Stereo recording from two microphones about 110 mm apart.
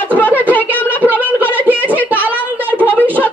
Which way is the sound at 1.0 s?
15° right (ahead or behind).